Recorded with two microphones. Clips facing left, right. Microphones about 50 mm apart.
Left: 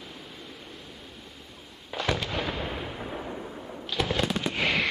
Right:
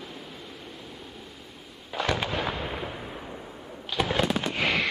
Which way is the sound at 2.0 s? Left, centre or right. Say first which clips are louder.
Right 2 dB; centre.